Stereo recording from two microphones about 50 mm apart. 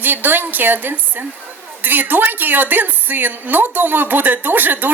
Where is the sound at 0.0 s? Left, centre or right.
Right.